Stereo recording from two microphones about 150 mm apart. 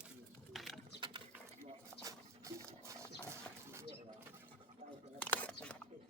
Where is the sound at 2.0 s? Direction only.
20° right (ahead or behind).